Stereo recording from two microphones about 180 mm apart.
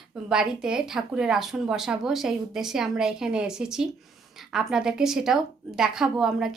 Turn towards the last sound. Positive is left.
turn(degrees=0)  # may be behind; listen again after turning